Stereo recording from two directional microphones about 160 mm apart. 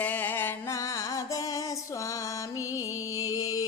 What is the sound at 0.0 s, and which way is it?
Music, 10° left (ahead or behind).